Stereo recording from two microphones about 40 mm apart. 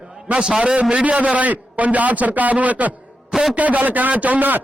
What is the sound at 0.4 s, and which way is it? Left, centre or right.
Speech, centre.